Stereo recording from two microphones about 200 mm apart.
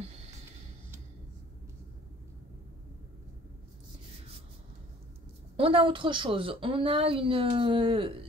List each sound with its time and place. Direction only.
5.6 s a woman's voice: 25° right (ahead or behind)